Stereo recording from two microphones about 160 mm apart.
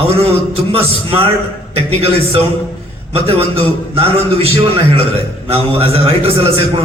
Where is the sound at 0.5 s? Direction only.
35° right (ahead or behind).